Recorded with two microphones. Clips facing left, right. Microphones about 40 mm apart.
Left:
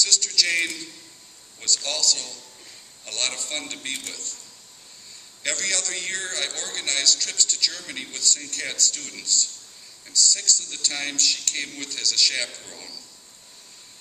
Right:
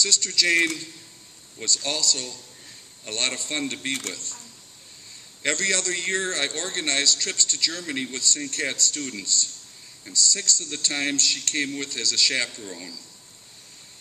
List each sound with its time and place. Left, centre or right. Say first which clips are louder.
0.0 s a man's voice: even; right
5.4 s a man's voice: right 3 dB; right